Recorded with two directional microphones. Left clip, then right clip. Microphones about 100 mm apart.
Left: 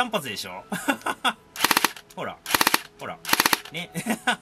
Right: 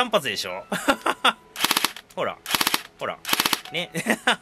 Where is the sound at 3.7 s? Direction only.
20° right (ahead or behind).